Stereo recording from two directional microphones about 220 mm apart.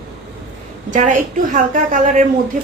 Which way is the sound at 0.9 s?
35° right (ahead or behind).